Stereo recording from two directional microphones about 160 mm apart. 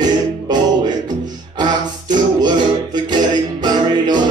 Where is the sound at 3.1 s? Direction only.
25° right (ahead or behind).